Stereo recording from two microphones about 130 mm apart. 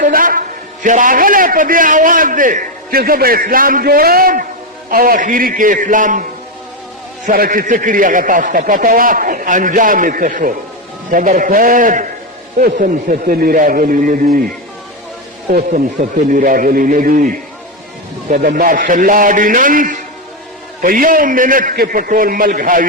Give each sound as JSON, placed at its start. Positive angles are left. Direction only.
{"t": 0.0, "sound": "a man's voice", "side_deg": -90}
{"t": 7.3, "sound": "a man's voice", "side_deg": -90}
{"t": 15.7, "sound": "a man's voice", "side_deg": -75}